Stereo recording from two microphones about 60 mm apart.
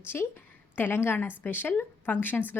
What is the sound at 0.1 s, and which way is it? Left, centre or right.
Speech, left.